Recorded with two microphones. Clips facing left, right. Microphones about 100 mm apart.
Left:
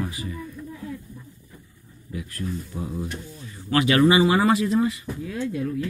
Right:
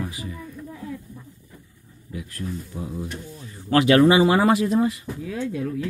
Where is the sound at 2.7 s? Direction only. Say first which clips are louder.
Left 1 dB; 10° right (ahead or behind).